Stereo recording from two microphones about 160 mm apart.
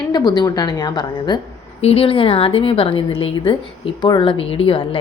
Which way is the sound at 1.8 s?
35° left (ahead or behind).